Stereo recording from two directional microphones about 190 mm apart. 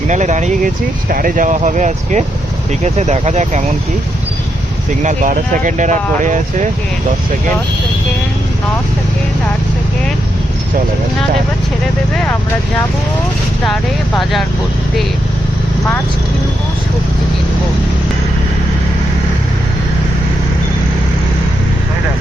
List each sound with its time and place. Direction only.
0.1 s speech: 40° right (ahead or behind)
5.0 s speech: 40° right (ahead or behind)
12.1 s speech: 5° left (ahead or behind)